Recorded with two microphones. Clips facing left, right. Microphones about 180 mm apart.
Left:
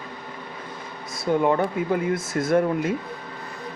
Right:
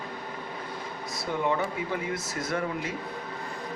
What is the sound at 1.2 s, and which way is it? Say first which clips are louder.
Speech: left 7 dB; 50° left (ahead or behind).